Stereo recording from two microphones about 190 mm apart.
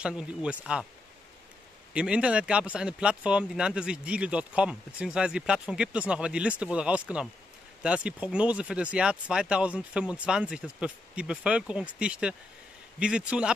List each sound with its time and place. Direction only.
0.0 s speech: 5° right (ahead or behind)
2.0 s speech: 5° right (ahead or behind)